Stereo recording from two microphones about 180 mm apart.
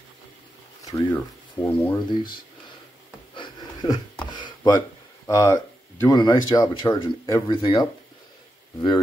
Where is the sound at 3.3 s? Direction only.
25° left (ahead or behind).